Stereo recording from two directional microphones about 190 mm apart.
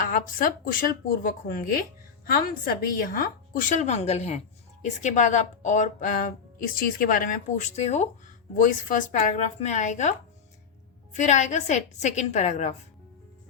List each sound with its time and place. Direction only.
0.1 s a woman's voice: 45° left (ahead or behind)